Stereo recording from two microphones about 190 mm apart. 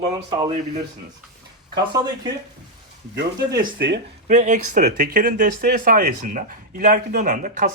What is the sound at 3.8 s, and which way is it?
Speech, 65° right (ahead or behind).